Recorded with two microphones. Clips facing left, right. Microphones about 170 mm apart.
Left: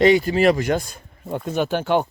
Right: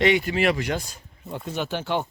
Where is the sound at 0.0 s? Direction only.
35° left (ahead or behind).